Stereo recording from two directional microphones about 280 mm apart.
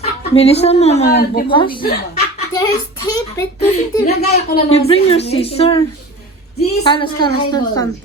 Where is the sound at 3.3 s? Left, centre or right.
Centre.